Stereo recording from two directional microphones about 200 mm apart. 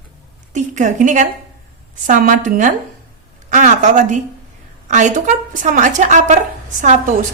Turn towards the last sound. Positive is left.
turn(degrees=-40)  # may be behind; listen again after turning